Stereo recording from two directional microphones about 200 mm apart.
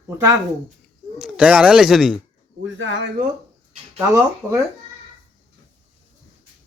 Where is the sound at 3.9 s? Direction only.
15° right (ahead or behind).